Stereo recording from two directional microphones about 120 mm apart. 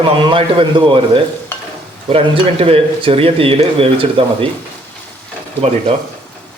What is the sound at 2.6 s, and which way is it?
A man's voice, 55° right (ahead or behind).